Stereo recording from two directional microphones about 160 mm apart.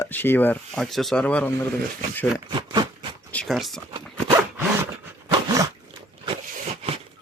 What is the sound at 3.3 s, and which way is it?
Speech, 5° left (ahead or behind).